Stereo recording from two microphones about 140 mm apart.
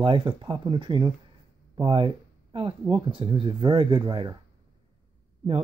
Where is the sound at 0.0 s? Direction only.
35° right (ahead or behind).